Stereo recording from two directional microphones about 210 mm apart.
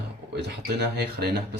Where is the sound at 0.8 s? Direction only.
50° right (ahead or behind).